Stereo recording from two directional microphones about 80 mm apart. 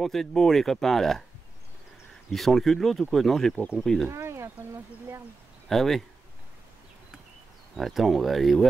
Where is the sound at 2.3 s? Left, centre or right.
Centre.